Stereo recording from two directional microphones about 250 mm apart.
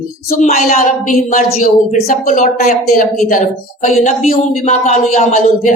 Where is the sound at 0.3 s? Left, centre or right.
Left.